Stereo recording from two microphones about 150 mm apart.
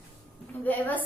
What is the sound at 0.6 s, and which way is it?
Speech, 10° left (ahead or behind).